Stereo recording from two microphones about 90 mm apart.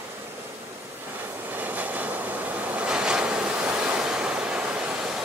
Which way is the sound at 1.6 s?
20° right (ahead or behind).